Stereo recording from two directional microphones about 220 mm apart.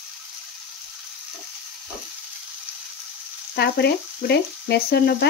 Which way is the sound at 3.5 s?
45° left (ahead or behind).